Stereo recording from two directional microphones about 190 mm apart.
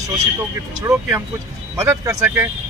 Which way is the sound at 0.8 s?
15° right (ahead or behind).